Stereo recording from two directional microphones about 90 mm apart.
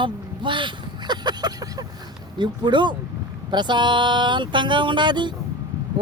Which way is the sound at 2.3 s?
60° right (ahead or behind).